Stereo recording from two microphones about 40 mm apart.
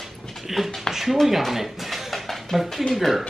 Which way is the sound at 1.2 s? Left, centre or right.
Centre.